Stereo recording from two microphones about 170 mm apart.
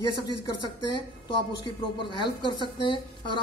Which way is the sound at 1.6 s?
25° left (ahead or behind).